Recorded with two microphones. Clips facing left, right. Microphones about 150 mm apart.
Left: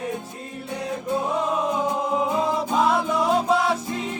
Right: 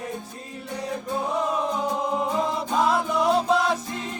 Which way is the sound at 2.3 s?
Centre (ahead or behind).